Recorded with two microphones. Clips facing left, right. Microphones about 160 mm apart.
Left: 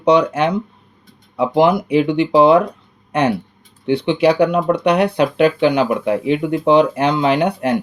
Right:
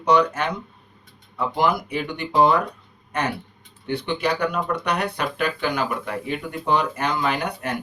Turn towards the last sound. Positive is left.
turn(degrees=65)  # may be behind; listen again after turning